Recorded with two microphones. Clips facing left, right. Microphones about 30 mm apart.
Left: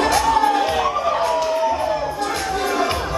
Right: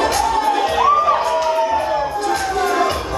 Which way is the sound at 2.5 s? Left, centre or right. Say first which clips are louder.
Right 2 dB; centre.